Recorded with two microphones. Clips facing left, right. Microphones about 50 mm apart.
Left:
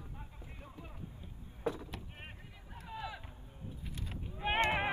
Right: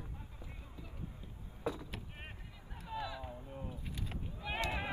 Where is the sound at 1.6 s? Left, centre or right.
Left.